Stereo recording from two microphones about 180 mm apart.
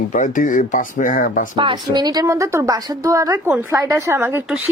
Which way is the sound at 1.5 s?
25° right (ahead or behind).